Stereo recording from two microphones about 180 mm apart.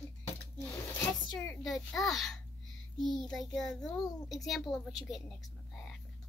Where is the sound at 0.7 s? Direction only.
20° left (ahead or behind).